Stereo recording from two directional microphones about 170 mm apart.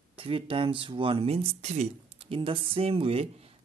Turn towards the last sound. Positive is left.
turn(degrees=-35)  # may be behind; listen again after turning